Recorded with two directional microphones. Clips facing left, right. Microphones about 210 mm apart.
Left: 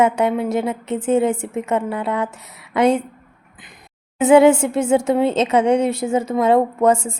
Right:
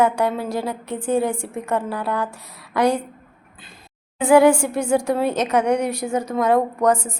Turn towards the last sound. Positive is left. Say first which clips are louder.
# left 3 dB
turn(degrees=25)  # may be behind; listen again after turning